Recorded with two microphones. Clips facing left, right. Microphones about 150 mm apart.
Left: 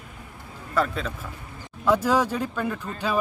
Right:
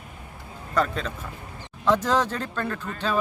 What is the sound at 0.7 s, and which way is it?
Speech, 5° left (ahead or behind).